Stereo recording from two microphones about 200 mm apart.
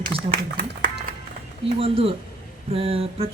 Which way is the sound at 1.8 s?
30° right (ahead or behind).